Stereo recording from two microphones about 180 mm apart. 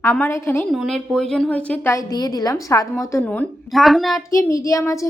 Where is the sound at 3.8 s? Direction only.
Centre (ahead or behind).